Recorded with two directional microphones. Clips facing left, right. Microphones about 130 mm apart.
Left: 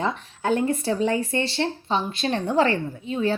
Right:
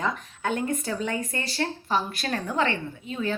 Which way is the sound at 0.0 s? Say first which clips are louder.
Left 3 dB; 30° left (ahead or behind).